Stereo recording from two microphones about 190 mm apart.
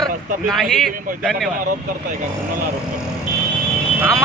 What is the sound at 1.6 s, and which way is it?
Speech, 45° right (ahead or behind).